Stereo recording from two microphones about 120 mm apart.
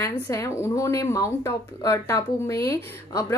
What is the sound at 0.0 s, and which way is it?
Speech, 25° left (ahead or behind).